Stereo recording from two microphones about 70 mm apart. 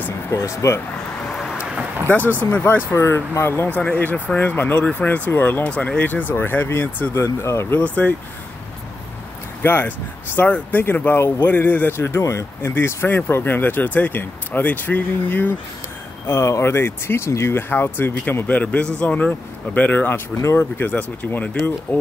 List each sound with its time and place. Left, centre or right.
0.3 s speech: left
1.3 s vehicle: centre
1.6 s a sound: centre
2.5 s speech: left
3.7 s speech: left
7.8 s speech: left
9.6 s speech: left
12.0 s speech: left
16.3 s speech: left